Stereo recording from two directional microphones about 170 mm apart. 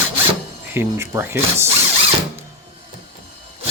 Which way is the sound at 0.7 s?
15° right (ahead or behind).